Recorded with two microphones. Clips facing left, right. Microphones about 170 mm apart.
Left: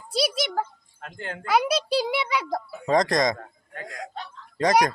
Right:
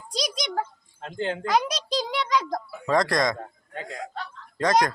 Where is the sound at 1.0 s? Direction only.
25° right (ahead or behind).